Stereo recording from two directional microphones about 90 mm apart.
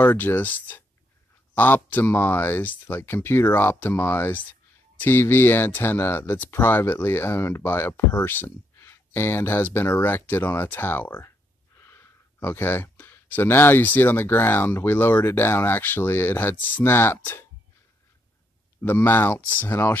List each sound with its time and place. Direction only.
0.0 s speech: 25° left (ahead or behind)
18.8 s speech: 25° left (ahead or behind)